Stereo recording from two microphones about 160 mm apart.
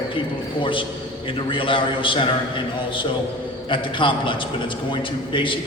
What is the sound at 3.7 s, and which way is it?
A man's voice, 30° left (ahead or behind).